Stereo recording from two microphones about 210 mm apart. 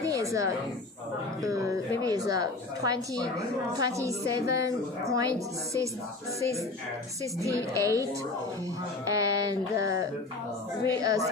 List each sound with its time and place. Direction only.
0.0 s a sound: 15° right (ahead or behind)
1.4 s a woman's voice: 15° right (ahead or behind)
7.4 s a woman's voice: 15° right (ahead or behind)
9.0 s a woman's voice: 15° right (ahead or behind)